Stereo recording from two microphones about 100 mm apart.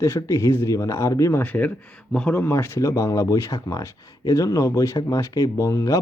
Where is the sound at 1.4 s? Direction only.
15° left (ahead or behind).